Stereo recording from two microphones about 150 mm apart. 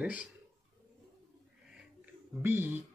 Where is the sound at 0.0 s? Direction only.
10° right (ahead or behind).